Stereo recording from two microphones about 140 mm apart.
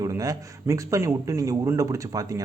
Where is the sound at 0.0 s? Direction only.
25° right (ahead or behind).